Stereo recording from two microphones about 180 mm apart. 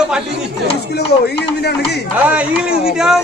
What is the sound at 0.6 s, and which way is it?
Speech, 65° left (ahead or behind).